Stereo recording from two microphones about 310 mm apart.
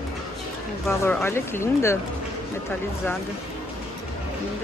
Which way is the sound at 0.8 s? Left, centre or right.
Centre.